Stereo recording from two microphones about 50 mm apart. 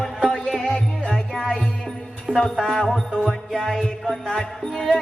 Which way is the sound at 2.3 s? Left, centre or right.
Left.